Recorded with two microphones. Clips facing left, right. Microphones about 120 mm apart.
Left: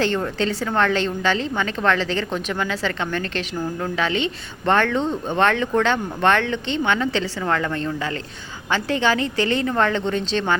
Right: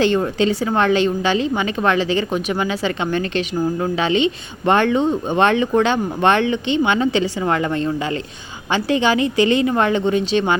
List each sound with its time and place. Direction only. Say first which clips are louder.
0.0 s a woman's voice: right 5 dB; 15° right (ahead or behind)